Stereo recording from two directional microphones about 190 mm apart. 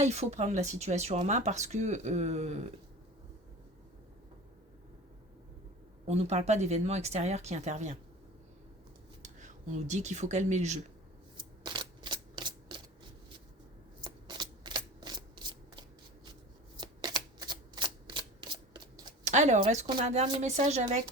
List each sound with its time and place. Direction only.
0.0 s speech: 35° right (ahead or behind)
6.1 s speech: 35° right (ahead or behind)
9.2 s speech: 40° right (ahead or behind)
11.3 s shuffling cards: 25° right (ahead or behind)
14.0 s shuffling cards: 20° right (ahead or behind)
16.7 s shuffling cards: 20° right (ahead or behind)
19.2 s speech: 40° right (ahead or behind)